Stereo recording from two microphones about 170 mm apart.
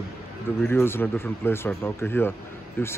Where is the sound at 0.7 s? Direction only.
15° left (ahead or behind).